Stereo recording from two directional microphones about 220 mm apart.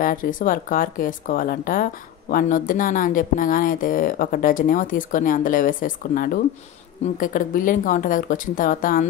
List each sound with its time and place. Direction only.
0.0 s speech: 40° left (ahead or behind)